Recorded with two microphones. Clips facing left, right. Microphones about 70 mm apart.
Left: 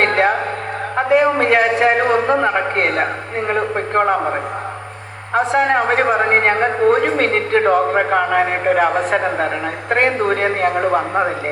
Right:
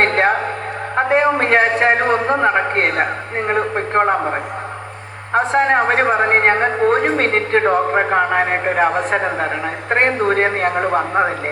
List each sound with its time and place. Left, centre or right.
0.0 s music: right
0.9 s a man's voice: right
5.3 s a man's voice: right